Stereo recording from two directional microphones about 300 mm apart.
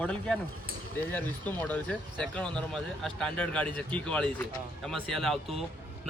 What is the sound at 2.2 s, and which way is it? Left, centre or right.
A man's voice, centre.